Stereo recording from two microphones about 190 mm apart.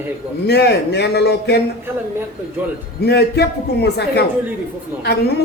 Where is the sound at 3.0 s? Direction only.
60° left (ahead or behind).